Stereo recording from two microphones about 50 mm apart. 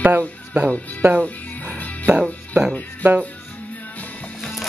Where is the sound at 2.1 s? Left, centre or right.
Centre.